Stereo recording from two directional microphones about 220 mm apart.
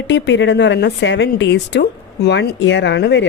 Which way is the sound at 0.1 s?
55° left (ahead or behind).